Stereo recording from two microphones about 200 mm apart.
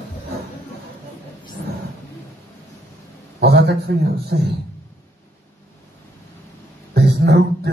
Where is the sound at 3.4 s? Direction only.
55° right (ahead or behind).